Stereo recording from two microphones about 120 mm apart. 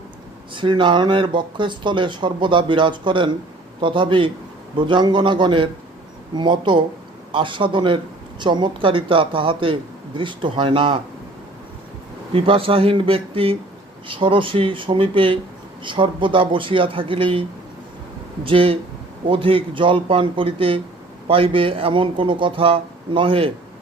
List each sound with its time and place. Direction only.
0.5 s speech: 45° right (ahead or behind)
12.3 s speech: 50° right (ahead or behind)
18.4 s speech: 50° right (ahead or behind)